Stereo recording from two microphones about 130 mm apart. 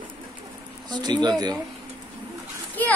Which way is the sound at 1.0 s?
35° right (ahead or behind).